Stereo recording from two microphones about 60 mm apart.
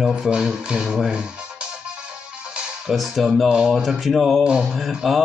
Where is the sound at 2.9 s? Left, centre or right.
Centre.